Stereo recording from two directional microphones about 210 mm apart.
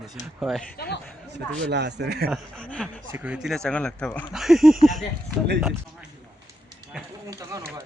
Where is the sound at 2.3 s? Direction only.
5° left (ahead or behind).